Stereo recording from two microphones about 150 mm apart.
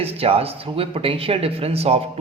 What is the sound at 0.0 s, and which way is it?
Speech, 40° right (ahead or behind).